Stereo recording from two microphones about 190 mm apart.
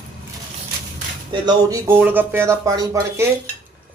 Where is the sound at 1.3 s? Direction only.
25° right (ahead or behind).